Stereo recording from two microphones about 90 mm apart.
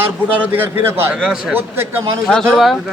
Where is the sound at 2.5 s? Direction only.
Centre (ahead or behind).